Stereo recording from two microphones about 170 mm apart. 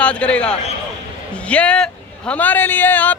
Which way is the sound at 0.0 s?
5° left (ahead or behind).